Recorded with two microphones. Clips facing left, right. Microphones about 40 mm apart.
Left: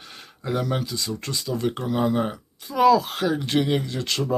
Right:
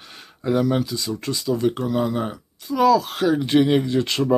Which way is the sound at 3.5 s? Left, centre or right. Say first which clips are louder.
Right 5 dB; centre.